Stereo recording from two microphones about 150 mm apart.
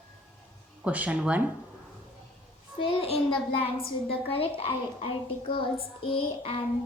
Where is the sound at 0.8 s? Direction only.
10° right (ahead or behind).